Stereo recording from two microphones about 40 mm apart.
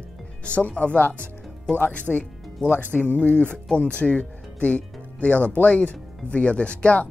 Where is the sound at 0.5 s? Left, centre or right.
Left.